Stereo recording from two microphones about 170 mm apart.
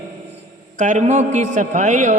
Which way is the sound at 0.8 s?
45° right (ahead or behind).